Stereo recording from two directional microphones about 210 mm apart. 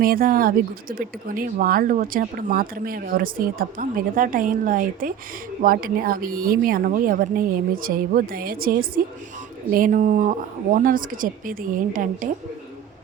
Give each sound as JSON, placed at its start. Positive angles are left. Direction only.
{"t": 0.0, "sound": "a woman's voice", "side_deg": -45}